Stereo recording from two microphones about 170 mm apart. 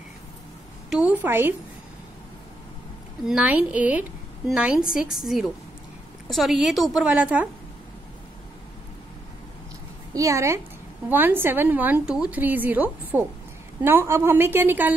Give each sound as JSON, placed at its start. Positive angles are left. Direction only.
{"t": 0.8, "sound": "a woman's voice", "side_deg": -5}
{"t": 3.3, "sound": "a woman's voice", "side_deg": -5}
{"t": 10.1, "sound": "a woman's voice", "side_deg": -20}